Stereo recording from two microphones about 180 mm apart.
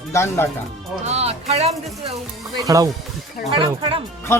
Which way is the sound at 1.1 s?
35° right (ahead or behind).